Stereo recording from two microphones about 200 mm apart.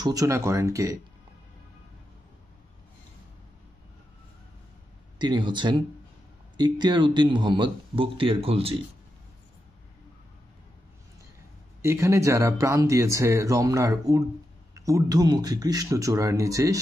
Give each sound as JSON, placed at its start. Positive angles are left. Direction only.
{"t": 0.0, "sound": "speech", "side_deg": -15}
{"t": 5.2, "sound": "speech", "side_deg": -20}
{"t": 11.8, "sound": "speech", "side_deg": -15}